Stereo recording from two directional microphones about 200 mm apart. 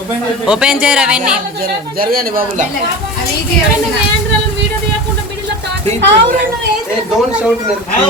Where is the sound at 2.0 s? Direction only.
45° right (ahead or behind).